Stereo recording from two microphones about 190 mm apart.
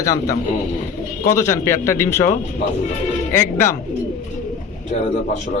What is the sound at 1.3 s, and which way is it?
Speech, 15° left (ahead or behind).